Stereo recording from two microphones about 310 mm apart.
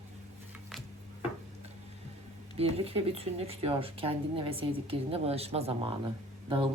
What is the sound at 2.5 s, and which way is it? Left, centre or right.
Speech, centre.